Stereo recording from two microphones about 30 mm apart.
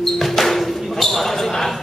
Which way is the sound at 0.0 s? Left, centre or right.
Centre.